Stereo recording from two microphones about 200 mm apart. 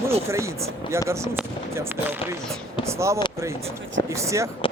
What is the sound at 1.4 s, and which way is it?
Gunshot, 10° right (ahead or behind).